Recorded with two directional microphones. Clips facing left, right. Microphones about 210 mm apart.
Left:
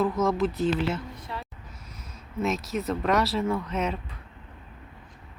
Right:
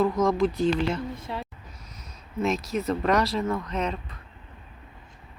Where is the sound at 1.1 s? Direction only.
25° right (ahead or behind).